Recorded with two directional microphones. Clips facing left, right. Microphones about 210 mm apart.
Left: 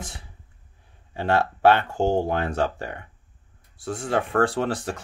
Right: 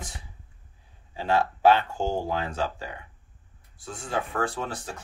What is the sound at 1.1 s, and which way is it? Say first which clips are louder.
Speech: left 2 dB; 65° left (ahead or behind).